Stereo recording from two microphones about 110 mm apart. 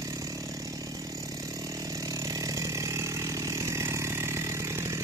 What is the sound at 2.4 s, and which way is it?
Chainsaw, 30° right (ahead or behind).